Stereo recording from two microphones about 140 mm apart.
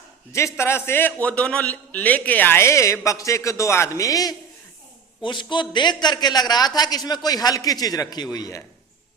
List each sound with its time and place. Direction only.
0.3 s a man's voice: 20° left (ahead or behind)